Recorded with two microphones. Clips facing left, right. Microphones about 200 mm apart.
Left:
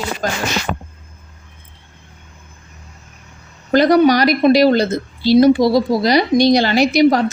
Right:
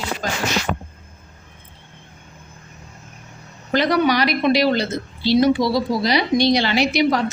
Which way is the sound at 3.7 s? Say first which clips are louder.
Left 7 dB; 40° left (ahead or behind).